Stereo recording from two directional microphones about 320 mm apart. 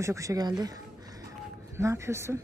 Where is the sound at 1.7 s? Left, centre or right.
Centre.